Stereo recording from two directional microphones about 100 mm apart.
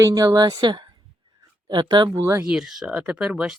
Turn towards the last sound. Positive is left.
turn(degrees=-10)  # may be behind; listen again after turning